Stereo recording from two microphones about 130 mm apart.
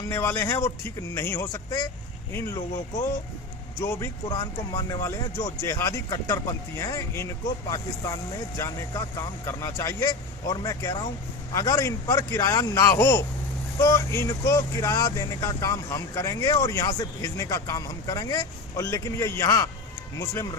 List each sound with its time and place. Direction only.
0.1 s speech: 20° left (ahead or behind)
3.8 s speech: 20° left (ahead or behind)
4.3 s speech: 35° left (ahead or behind)